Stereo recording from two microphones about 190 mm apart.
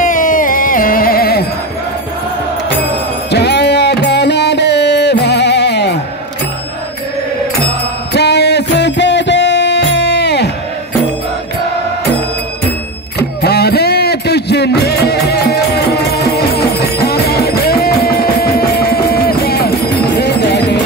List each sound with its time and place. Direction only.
0.0 s music: 45° left (ahead or behind)
3.3 s music: 60° left (ahead or behind)
7.6 s music: 60° left (ahead or behind)
13.4 s music: 60° left (ahead or behind)